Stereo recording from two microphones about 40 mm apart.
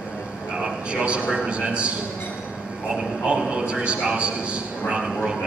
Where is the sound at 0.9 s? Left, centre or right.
Right.